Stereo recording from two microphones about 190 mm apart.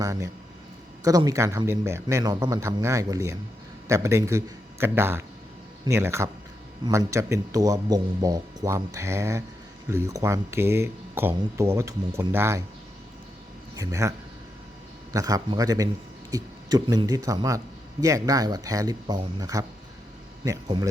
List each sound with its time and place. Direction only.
0.0 s speech: 15° right (ahead or behind)
13.7 s speech: 15° right (ahead or behind)
15.1 s speech: 20° right (ahead or behind)